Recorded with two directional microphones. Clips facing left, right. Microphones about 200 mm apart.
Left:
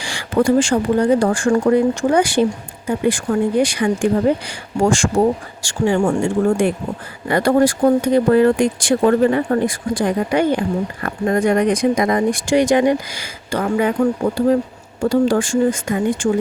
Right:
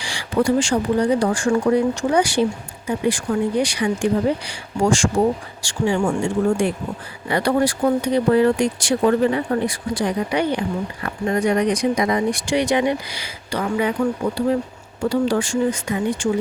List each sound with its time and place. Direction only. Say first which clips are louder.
0.0 s speech: left 3 dB; 50° left (ahead or behind)
15.1 s speech: left 4 dB; 50° left (ahead or behind)